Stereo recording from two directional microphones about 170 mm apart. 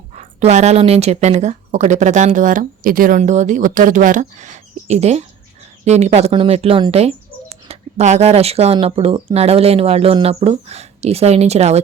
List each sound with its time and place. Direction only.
0.2 s speech: 40° right (ahead or behind)